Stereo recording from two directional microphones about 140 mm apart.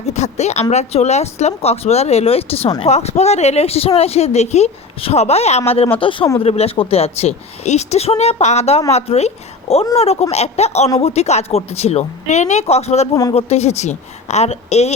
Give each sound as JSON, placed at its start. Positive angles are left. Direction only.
{"t": 0.1, "sound": "a woman's voice", "side_deg": 55}